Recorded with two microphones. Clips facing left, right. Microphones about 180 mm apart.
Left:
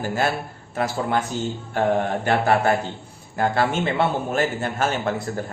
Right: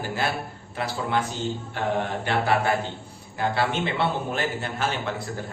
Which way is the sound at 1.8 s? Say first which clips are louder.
Left 7 dB; 45° left (ahead or behind).